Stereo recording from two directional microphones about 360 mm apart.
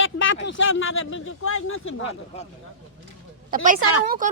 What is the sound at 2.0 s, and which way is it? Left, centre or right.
Speech, centre.